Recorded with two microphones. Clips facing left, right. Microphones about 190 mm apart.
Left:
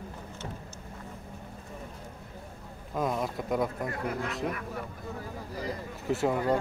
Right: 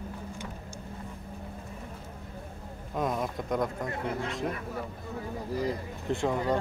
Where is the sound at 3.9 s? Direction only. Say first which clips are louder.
Even; 25° right (ahead or behind).